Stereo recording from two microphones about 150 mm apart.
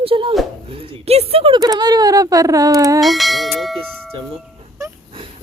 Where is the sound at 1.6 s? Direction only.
25° right (ahead or behind).